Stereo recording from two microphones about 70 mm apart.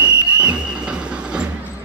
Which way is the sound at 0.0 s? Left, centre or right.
Centre.